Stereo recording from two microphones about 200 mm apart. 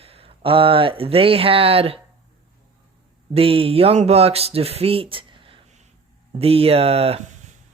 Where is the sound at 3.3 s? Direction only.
30° right (ahead or behind).